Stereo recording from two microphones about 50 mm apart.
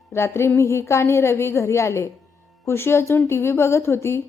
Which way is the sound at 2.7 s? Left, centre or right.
Left.